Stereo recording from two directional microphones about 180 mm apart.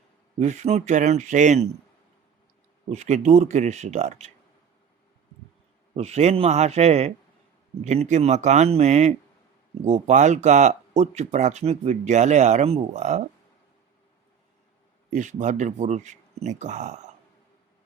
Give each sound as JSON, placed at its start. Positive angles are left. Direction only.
{"t": 0.3, "sound": "speech", "side_deg": -40}
{"t": 2.9, "sound": "speech", "side_deg": -40}
{"t": 6.0, "sound": "speech", "side_deg": -35}
{"t": 15.1, "sound": "speech", "side_deg": -45}